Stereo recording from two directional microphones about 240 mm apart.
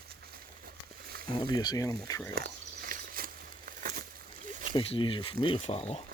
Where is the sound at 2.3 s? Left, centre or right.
Right.